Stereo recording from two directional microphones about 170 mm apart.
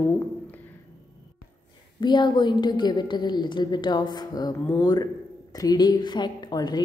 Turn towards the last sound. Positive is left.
turn(degrees=25)  # may be behind; listen again after turning